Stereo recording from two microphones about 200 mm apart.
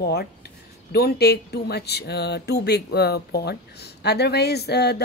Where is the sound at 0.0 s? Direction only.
55° left (ahead or behind).